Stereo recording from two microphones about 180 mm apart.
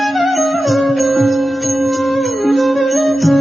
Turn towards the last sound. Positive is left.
turn(degrees=0)  # may be behind; listen again after turning